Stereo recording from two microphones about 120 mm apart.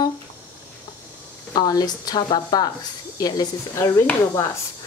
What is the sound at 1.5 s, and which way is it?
Speech, 35° left (ahead or behind).